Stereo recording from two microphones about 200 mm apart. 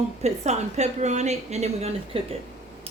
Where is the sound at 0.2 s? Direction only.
35° right (ahead or behind).